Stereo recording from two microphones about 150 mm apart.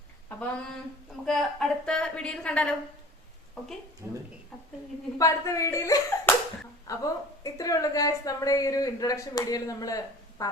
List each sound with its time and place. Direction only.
0.3 s a woman's voice: 10° left (ahead or behind)
4.0 s speech: 15° right (ahead or behind)
5.1 s a woman's voice: 20° left (ahead or behind)